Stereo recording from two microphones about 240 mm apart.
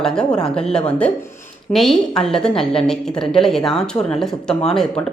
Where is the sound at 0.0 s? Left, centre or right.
Centre.